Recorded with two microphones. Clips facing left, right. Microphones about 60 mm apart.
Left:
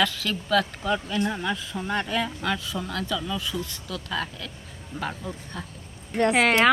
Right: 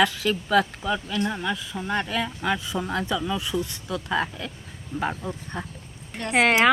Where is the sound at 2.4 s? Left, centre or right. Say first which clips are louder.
Right 2 dB; centre.